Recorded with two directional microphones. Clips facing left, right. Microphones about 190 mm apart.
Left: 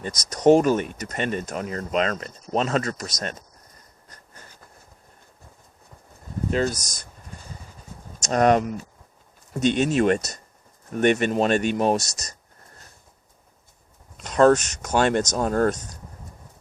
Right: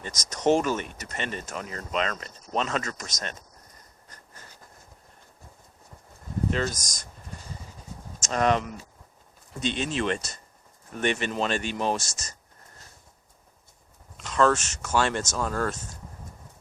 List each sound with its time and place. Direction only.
0.0 s speech: 35° left (ahead or behind)
0.5 s speech: 50° left (ahead or behind)
6.5 s speech: 40° left (ahead or behind)
8.2 s speech: 45° left (ahead or behind)
14.2 s speech: 45° left (ahead or behind)